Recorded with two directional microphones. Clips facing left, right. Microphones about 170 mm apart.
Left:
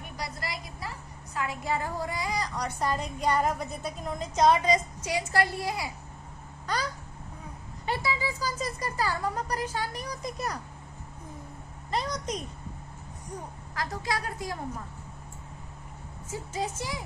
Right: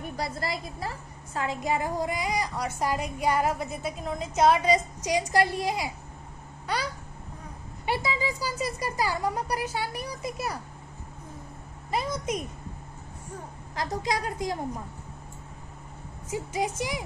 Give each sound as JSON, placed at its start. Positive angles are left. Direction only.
{"t": 0.7, "sound": "a woman's voice", "side_deg": -35}
{"t": 1.6, "sound": "speech", "side_deg": -15}
{"t": 7.8, "sound": "speech", "side_deg": -15}
{"t": 11.9, "sound": "speech", "side_deg": -5}
{"t": 13.7, "sound": "a woman's voice", "side_deg": -20}
{"t": 16.3, "sound": "speech", "side_deg": -15}